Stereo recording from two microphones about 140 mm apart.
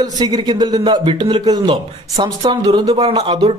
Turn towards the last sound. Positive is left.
turn(degrees=-35)  # may be behind; listen again after turning